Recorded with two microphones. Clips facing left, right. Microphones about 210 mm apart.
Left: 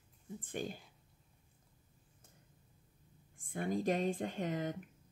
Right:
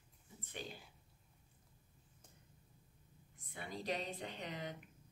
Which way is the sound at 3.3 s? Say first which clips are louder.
Left 11 dB; 50° left (ahead or behind).